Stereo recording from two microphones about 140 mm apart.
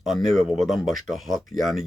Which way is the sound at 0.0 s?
Centre (ahead or behind).